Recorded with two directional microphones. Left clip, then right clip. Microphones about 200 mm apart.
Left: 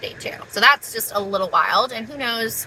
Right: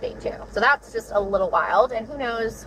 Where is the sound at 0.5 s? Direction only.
35° left (ahead or behind).